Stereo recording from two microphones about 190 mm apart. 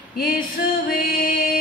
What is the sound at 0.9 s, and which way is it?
Music, 50° left (ahead or behind).